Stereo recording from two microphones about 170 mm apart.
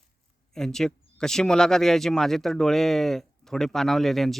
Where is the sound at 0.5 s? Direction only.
5° left (ahead or behind).